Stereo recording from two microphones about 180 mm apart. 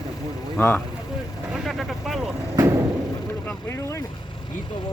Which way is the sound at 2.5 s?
15° right (ahead or behind).